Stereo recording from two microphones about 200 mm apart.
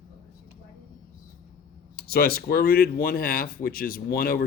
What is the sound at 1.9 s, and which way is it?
Speech, 50° left (ahead or behind).